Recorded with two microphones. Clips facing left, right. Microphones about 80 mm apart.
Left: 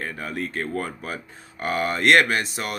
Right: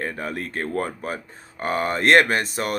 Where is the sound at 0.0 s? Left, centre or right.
Right.